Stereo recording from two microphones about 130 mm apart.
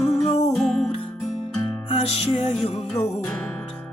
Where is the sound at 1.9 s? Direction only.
50° left (ahead or behind).